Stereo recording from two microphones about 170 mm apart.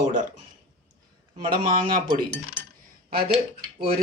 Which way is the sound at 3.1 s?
65° right (ahead or behind).